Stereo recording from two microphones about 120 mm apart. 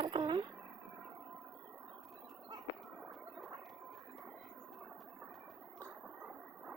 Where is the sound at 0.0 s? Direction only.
35° right (ahead or behind).